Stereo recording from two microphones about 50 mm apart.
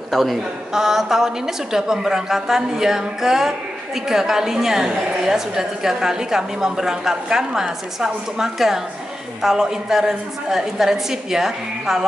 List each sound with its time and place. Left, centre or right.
0.1 s a woman's voice: centre